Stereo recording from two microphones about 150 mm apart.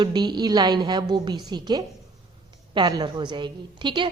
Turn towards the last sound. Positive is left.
turn(degrees=-30)  # may be behind; listen again after turning